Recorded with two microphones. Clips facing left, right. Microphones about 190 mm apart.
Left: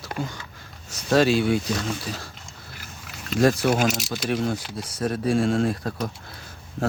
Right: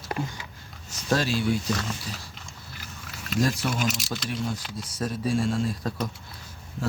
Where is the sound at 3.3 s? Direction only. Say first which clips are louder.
Left 7 dB; 65° left (ahead or behind).